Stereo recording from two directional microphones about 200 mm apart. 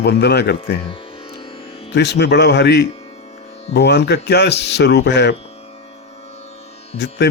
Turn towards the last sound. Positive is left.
turn(degrees=60)  # may be behind; listen again after turning